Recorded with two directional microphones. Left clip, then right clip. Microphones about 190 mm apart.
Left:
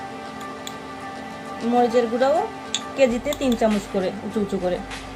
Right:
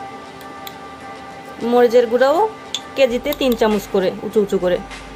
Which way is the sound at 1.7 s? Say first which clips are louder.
Right 7 dB; 40° right (ahead or behind).